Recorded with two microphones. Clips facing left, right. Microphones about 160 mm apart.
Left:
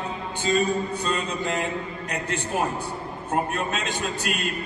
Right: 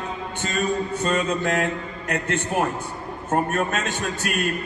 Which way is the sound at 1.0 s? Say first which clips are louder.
Right 4 dB; 55° right (ahead or behind).